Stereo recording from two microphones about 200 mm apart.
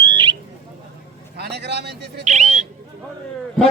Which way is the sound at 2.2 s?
35° right (ahead or behind).